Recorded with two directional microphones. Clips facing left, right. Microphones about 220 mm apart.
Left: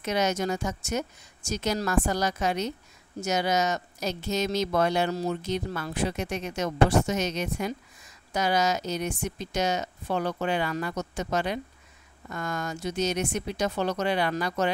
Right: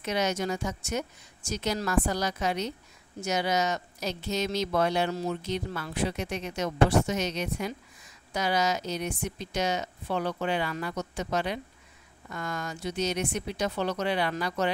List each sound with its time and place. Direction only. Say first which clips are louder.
0.0 s speech: left 2 dB; 45° left (ahead or behind)